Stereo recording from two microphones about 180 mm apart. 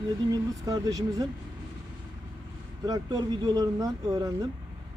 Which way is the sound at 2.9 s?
20° right (ahead or behind).